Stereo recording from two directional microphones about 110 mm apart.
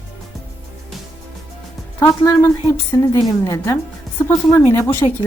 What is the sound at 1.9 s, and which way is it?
A woman's voice, 30° left (ahead or behind).